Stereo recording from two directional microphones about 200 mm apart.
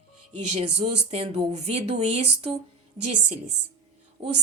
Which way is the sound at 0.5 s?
30° right (ahead or behind).